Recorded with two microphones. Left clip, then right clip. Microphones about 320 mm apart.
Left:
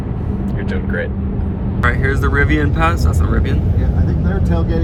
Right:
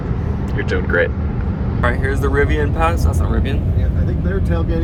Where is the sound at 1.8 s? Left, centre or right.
Left.